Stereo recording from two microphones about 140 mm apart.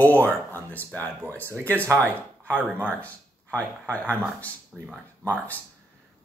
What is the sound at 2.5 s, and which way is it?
Speech, 10° right (ahead or behind).